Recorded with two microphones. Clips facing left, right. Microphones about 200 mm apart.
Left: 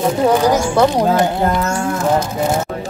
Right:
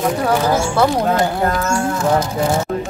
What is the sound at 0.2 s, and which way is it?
Speech, 15° left (ahead or behind).